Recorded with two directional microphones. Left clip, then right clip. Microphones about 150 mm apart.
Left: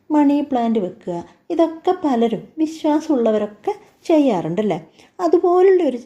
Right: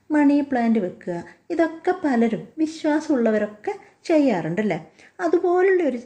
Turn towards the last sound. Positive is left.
turn(degrees=30)  # may be behind; listen again after turning